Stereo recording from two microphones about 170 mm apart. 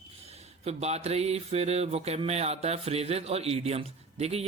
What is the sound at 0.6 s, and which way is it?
A man's voice, 40° right (ahead or behind).